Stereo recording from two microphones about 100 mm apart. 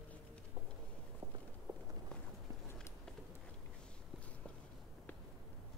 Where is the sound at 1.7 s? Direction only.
40° right (ahead or behind).